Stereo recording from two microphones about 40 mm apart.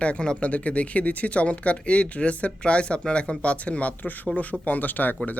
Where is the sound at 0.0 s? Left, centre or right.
Left.